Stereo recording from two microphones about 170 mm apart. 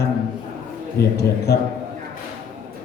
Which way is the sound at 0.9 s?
70° left (ahead or behind).